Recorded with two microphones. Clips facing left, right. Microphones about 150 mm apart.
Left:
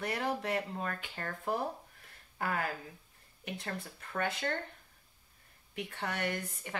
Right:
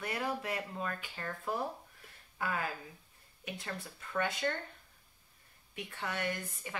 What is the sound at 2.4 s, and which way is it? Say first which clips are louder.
Speech: left 2 dB; 55° left (ahead or behind).